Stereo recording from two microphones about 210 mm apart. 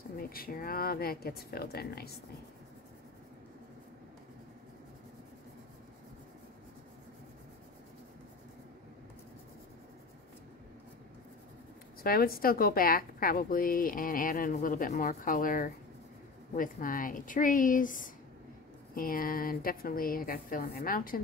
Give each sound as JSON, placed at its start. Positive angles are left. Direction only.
{"t": 0.2, "sound": "a woman's voice", "side_deg": 45}
{"t": 12.0, "sound": "a woman's voice", "side_deg": 45}